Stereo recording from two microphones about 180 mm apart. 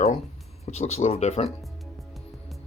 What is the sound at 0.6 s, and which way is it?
Speech, 35° left (ahead or behind).